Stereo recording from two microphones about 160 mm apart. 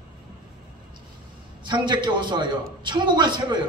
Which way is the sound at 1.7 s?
30° right (ahead or behind).